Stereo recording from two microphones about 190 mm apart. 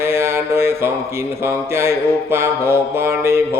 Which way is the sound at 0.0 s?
15° right (ahead or behind).